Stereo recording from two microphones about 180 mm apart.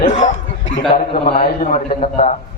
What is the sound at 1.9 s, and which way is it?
Speech, 40° left (ahead or behind).